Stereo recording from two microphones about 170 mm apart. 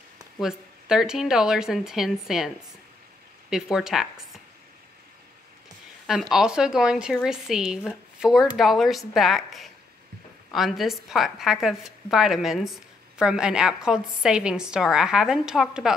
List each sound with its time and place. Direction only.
0.4 s a woman's voice: 5° right (ahead or behind)
3.7 s a woman's voice: centre (ahead or behind)
6.0 s a woman's voice: centre (ahead or behind)